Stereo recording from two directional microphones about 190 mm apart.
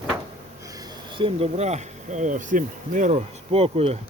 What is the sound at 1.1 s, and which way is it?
Speech, 30° right (ahead or behind).